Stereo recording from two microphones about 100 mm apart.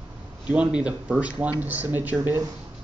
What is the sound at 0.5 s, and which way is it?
Speech, 10° right (ahead or behind).